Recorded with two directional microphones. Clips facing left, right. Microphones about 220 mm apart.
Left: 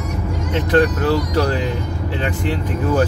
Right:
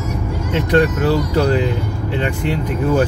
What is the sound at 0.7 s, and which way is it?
Speech, 15° right (ahead or behind).